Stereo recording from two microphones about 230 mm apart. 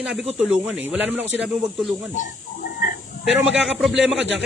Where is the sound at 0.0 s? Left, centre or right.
Centre.